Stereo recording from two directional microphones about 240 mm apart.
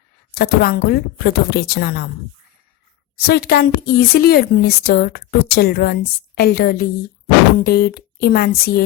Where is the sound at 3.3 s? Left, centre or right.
Left.